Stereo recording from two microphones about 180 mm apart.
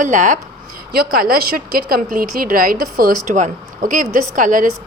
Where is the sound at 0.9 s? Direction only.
55° right (ahead or behind).